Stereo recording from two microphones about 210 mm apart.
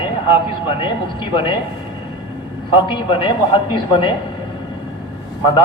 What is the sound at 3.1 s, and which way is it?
Speech, 25° left (ahead or behind).